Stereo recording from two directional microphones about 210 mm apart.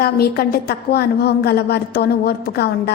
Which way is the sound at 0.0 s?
45° left (ahead or behind).